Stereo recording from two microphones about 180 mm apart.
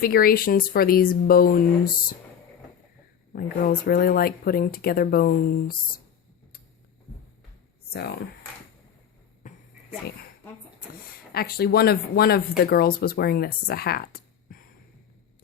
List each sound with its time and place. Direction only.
0.0 s speech: 55° left (ahead or behind)
3.3 s speech: 55° left (ahead or behind)
9.4 s a sound: 45° left (ahead or behind)
11.3 s speech: 60° left (ahead or behind)